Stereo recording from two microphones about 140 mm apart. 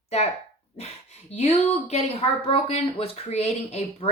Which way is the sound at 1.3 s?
50° left (ahead or behind).